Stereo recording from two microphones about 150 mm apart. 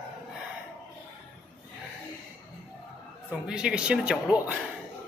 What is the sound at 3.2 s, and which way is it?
A man's voice, 5° right (ahead or behind).